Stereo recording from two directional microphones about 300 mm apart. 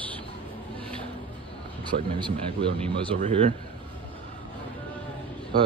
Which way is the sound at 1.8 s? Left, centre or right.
Centre.